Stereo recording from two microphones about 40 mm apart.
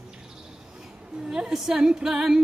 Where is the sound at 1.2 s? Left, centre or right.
Centre.